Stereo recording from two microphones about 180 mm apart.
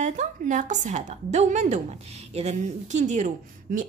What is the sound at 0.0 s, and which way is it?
A woman's voice, 40° right (ahead or behind).